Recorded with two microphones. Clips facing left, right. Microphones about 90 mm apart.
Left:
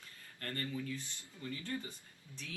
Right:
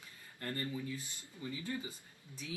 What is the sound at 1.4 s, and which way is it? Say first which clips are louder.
Speech: right 1 dB; 10° right (ahead or behind).